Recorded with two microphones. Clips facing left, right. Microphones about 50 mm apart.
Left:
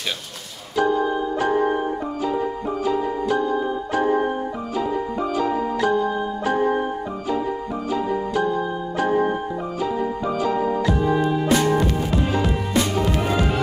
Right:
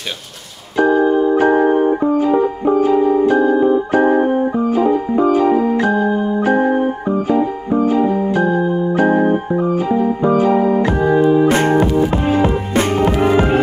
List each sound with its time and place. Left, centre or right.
0.7 s music: right